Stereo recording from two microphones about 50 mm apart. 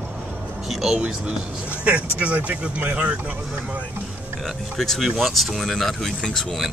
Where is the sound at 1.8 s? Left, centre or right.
Right.